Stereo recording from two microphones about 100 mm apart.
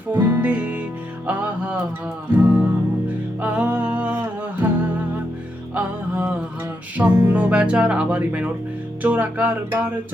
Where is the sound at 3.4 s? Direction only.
10° right (ahead or behind).